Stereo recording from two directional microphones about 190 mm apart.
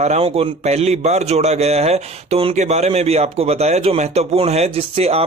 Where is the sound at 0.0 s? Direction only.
35° right (ahead or behind).